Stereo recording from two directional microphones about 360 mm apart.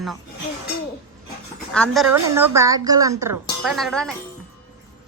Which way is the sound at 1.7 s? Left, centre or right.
Centre.